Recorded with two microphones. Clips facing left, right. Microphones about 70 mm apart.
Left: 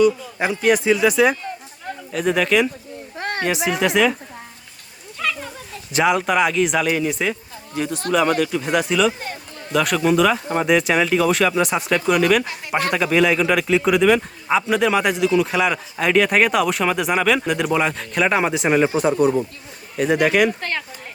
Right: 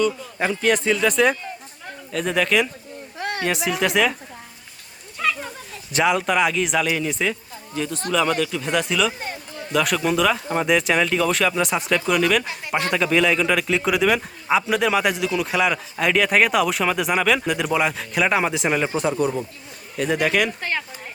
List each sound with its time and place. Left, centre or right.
0.0 s a man's voice: centre
3.2 s a sound: left
3.4 s a man's voice: centre
5.9 s a man's voice: centre
8.7 s a man's voice: centre
20.6 s speech: centre